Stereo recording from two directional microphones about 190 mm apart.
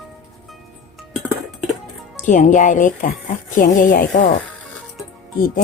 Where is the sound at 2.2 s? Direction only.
40° left (ahead or behind).